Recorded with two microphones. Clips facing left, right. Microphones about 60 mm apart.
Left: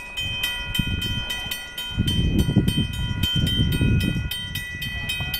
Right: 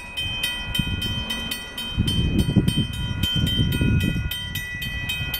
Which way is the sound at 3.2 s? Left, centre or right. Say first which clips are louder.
Even; centre.